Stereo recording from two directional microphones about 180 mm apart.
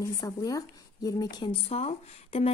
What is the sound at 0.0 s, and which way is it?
Speech, 20° left (ahead or behind).